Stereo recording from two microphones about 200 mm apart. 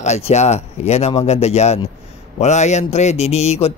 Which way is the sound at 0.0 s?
35° left (ahead or behind).